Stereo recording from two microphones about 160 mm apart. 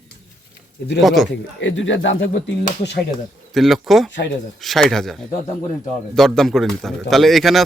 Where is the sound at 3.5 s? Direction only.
Centre (ahead or behind).